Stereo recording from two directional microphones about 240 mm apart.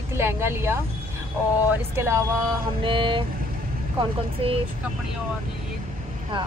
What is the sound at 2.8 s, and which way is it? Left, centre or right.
Speech, right.